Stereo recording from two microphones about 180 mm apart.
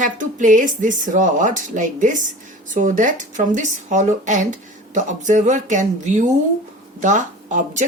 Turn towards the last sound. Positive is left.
turn(degrees=-45)  # may be behind; listen again after turning